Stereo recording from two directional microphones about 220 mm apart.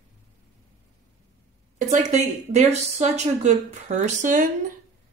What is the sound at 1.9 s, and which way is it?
Speech, 30° right (ahead or behind).